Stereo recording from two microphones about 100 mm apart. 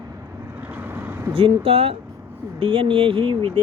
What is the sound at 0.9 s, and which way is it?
Vehicle, 20° right (ahead or behind).